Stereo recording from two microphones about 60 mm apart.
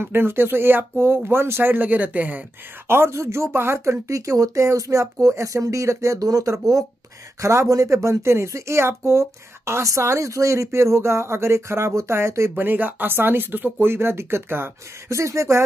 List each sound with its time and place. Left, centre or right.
0.0 s speech: right
2.9 s speech: right
7.3 s speech: right
12.5 s speech: right
15.0 s speech: right